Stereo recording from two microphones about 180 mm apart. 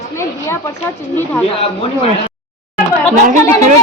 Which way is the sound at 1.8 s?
30° left (ahead or behind).